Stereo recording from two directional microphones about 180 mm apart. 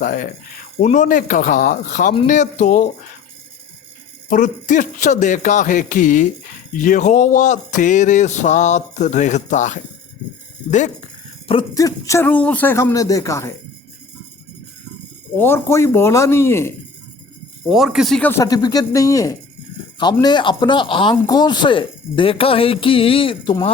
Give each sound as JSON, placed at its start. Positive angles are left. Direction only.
{"t": 0.0, "sound": "music", "side_deg": 50}
{"t": 4.3, "sound": "music", "side_deg": 45}
{"t": 10.7, "sound": "speech", "side_deg": 40}
{"t": 11.7, "sound": "speech", "side_deg": 20}
{"t": 15.4, "sound": "speech", "side_deg": 15}
{"t": 17.7, "sound": "speech", "side_deg": 0}